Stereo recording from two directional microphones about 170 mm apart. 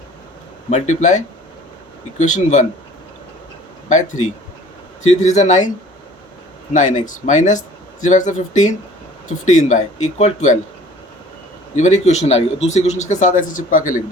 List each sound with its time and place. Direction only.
0.7 s speech: 45° left (ahead or behind)
3.8 s speech: 45° left (ahead or behind)
6.7 s speech: 45° left (ahead or behind)
11.8 s a man's voice: 45° left (ahead or behind)